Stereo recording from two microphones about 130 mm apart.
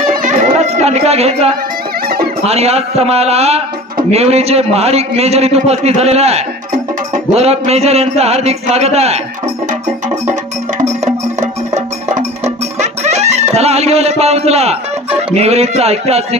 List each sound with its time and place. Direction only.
0.0 s a sound: 85° right; by 1.5 s 55° right (ahead or behind)
2.4 s a man's voice: 55° right (ahead or behind)
11.7 s music: 60° right (ahead or behind)
15.3 s a man's voice: 55° right (ahead or behind)